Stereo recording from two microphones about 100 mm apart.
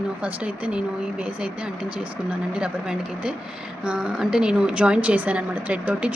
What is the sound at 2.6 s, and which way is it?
A woman's voice, 10° right (ahead or behind).